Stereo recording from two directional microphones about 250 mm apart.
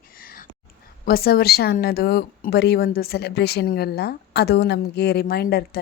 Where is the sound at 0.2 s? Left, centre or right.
Left.